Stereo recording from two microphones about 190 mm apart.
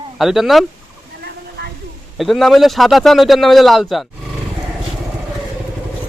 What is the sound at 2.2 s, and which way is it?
A man's voice, centre (ahead or behind).